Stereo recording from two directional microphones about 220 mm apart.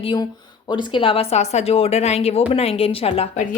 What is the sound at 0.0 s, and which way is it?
Speech, 20° left (ahead or behind).